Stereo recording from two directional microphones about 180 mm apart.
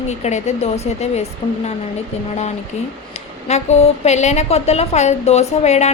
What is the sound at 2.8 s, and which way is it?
A woman's voice, 35° left (ahead or behind).